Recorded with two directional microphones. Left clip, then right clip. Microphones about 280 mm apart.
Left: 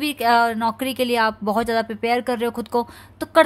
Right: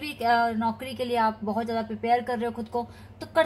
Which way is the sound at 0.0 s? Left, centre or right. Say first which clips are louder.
Left 6 dB; left.